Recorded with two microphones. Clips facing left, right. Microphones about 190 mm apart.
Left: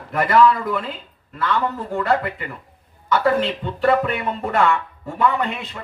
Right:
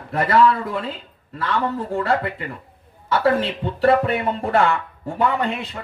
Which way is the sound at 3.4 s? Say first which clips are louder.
Right 1 dB; 30° right (ahead or behind).